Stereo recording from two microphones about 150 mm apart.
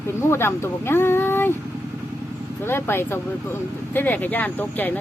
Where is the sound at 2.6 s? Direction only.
15° left (ahead or behind).